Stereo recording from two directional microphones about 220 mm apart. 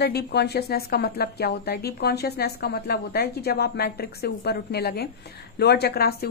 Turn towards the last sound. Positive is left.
turn(degrees=45)  # may be behind; listen again after turning